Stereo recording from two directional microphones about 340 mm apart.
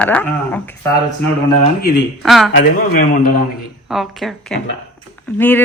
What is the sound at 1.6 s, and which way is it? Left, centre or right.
Speech, left.